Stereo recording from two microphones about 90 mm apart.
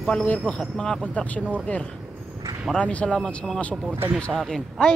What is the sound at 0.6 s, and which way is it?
Speech, 5° left (ahead or behind).